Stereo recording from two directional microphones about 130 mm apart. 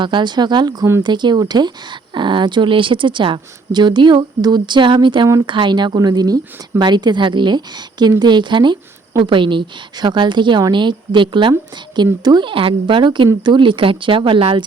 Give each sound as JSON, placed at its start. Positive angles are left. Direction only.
{"t": 0.0, "sound": "speech", "side_deg": -35}